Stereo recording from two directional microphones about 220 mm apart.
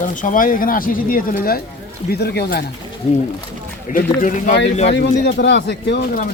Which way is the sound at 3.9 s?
35° left (ahead or behind).